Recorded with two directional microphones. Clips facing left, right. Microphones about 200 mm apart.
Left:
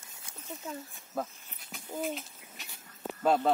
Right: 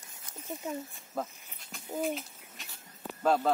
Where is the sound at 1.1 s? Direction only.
Centre (ahead or behind).